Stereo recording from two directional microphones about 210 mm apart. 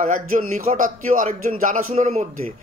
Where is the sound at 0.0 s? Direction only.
40° right (ahead or behind).